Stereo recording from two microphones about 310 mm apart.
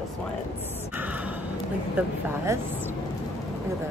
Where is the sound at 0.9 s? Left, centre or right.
Centre.